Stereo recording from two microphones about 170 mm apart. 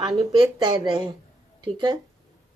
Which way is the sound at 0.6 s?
30° right (ahead or behind).